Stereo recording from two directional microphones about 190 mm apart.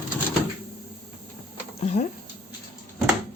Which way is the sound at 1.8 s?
40° left (ahead or behind).